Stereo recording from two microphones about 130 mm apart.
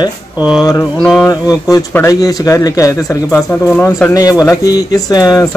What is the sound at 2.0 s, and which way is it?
Speech, 25° left (ahead or behind).